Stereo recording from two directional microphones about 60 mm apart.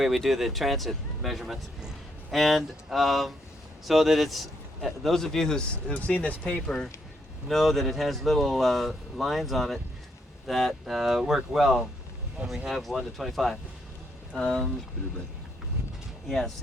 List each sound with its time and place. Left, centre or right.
0.0 s speech: centre
5.9 s speech: left
7.4 s speech: centre